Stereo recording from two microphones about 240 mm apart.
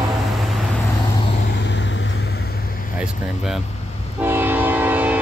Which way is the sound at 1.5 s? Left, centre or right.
Left.